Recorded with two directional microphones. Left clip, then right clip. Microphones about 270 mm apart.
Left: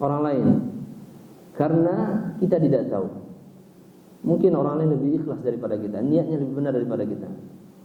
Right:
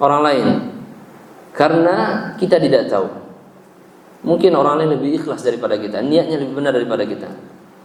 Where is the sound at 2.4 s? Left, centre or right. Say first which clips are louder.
Right 8 dB; centre.